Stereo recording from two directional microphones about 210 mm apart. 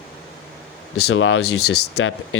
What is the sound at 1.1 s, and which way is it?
Speech, 65° left (ahead or behind).